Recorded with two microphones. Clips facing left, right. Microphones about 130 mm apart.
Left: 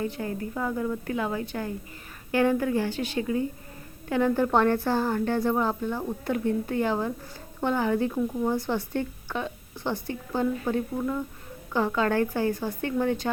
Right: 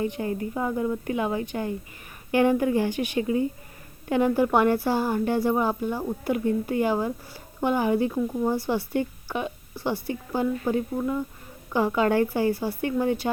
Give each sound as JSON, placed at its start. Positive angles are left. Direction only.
{"t": 0.0, "sound": "speech", "side_deg": -20}